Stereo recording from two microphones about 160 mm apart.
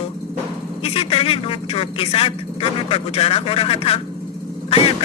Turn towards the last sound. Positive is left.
turn(degrees=35)  # may be behind; listen again after turning